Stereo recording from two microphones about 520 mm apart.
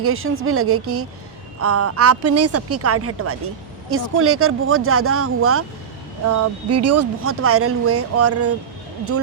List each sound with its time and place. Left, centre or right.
0.0 s speech: right